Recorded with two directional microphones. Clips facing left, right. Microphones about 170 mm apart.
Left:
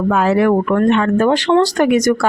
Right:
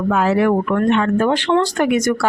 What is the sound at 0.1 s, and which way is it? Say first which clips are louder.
Speech: left 2 dB; 55° left (ahead or behind).